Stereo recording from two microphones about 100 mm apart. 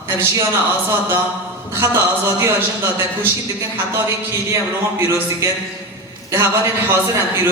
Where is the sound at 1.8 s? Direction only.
30° right (ahead or behind).